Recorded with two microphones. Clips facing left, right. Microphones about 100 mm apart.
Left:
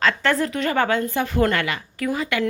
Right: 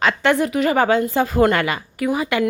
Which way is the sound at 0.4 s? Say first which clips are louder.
Right 4 dB; 10° right (ahead or behind).